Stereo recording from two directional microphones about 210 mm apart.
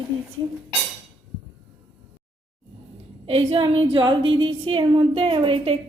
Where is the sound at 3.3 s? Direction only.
25° right (ahead or behind).